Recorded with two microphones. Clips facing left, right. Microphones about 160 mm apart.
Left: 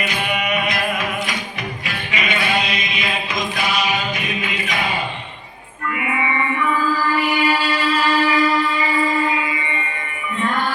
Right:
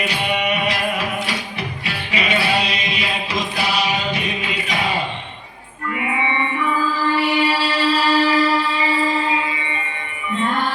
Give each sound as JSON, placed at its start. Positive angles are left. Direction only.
{"t": 0.1, "sound": "music", "side_deg": -35}
{"t": 6.0, "sound": "music", "side_deg": -30}